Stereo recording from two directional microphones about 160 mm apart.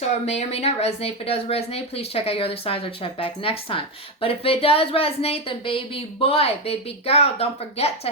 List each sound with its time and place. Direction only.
0.3 s speech: 40° left (ahead or behind)